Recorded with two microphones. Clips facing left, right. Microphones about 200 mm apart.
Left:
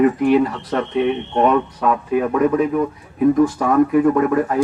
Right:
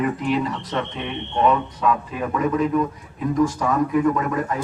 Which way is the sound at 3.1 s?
60° left (ahead or behind).